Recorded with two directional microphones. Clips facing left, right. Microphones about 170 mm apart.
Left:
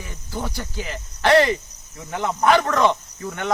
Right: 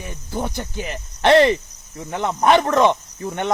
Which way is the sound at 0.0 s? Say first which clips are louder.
Right 3 dB; 20° right (ahead or behind).